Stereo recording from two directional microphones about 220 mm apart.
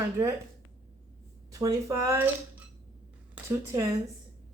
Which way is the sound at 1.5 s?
15° right (ahead or behind).